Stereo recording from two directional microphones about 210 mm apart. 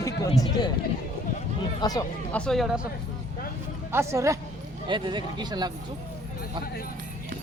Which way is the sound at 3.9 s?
15° right (ahead or behind).